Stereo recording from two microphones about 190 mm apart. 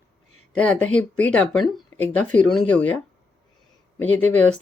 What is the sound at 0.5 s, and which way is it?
Speech, 5° left (ahead or behind).